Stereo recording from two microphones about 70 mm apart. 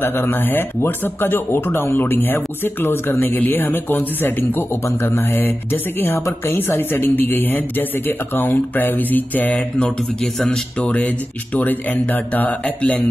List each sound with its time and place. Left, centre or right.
0.0 s speech: left
4.8 s speech: left
9.6 s speech: centre
10.9 s speech: centre